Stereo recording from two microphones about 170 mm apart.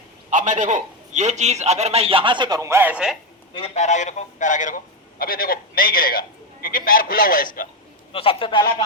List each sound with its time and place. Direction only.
0.3 s a man's voice: 45° right (ahead or behind); by 3.2 s 5° right (ahead or behind)
3.5 s speech: 40° left (ahead or behind)
5.2 s a man's voice: 60° left (ahead or behind)
8.1 s a man's voice: 35° left (ahead or behind)